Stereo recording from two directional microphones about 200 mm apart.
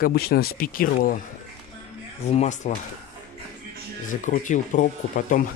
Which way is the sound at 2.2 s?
35° left (ahead or behind).